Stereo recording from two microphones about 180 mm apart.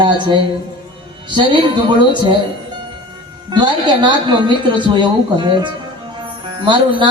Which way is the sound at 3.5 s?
25° right (ahead or behind).